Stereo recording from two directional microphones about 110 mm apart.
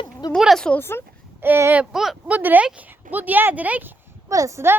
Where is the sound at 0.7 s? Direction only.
20° left (ahead or behind).